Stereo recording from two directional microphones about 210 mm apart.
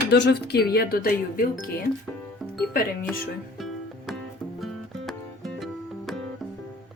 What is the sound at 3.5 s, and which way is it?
Music, centre (ahead or behind).